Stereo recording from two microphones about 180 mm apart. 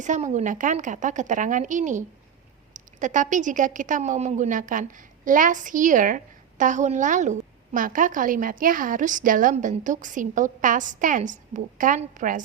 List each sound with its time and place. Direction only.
0.0 s a woman's voice: 40° right (ahead or behind)